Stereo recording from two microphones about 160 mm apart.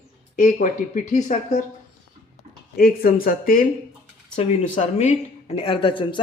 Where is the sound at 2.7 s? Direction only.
70° left (ahead or behind).